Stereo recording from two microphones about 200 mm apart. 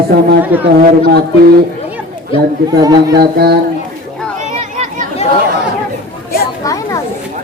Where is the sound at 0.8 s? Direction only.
45° right (ahead or behind).